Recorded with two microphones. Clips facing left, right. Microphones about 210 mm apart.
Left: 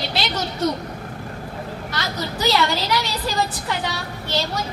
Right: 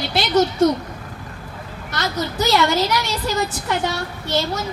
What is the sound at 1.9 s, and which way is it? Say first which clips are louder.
Speech: right 6 dB; 45° right (ahead or behind).